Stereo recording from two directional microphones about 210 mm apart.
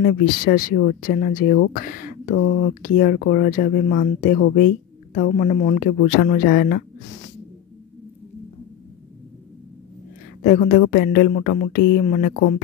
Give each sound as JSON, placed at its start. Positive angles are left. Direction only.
{"t": 0.0, "sound": "speech", "side_deg": 45}
{"t": 10.4, "sound": "speech", "side_deg": 40}